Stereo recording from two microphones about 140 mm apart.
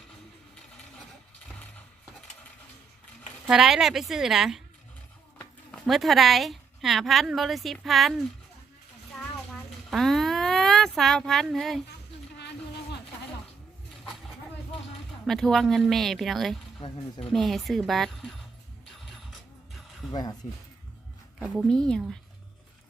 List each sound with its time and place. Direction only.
3.4 s speech: 5° right (ahead or behind)
9.1 s a sound: centre (ahead or behind)
15.3 s speech: centre (ahead or behind)
18.9 s music: centre (ahead or behind)
20.1 s speech: 30° left (ahead or behind)
21.3 s speech: 5° right (ahead or behind)
21.7 s speech: 5° left (ahead or behind)